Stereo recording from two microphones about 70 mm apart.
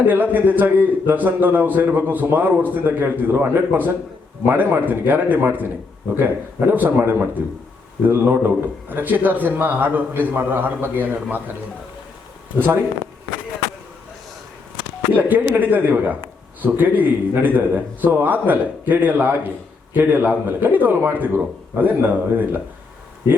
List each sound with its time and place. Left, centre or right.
0.0 s a man's voice: right
12.5 s speech: right
15.1 s a man's voice: right